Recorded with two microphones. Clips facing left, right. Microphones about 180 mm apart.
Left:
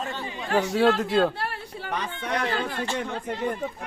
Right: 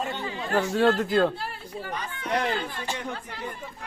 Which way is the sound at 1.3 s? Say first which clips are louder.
Left 2 dB; 70° left (ahead or behind).